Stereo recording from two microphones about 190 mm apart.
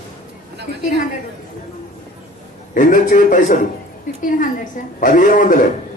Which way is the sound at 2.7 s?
45° left (ahead or behind).